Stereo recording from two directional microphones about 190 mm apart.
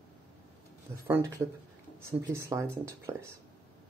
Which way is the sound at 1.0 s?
15° right (ahead or behind).